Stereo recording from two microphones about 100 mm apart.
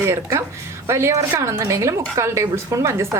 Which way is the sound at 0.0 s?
30° right (ahead or behind).